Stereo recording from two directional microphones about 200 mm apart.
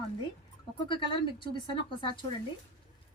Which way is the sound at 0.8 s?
25° left (ahead or behind).